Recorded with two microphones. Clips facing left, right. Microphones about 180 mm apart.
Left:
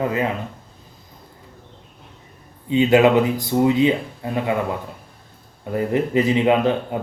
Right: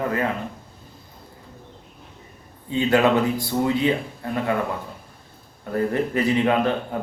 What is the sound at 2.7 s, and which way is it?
Speech, 15° left (ahead or behind).